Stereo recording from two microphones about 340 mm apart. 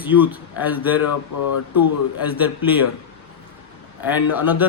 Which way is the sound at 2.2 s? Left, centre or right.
Centre.